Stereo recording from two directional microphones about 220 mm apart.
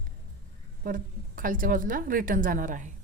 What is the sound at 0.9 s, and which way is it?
A woman's voice, 40° right (ahead or behind).